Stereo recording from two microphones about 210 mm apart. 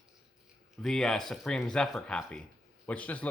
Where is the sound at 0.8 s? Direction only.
Centre (ahead or behind).